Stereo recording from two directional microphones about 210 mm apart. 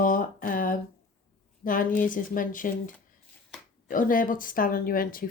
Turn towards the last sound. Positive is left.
turn(degrees=45)  # may be behind; listen again after turning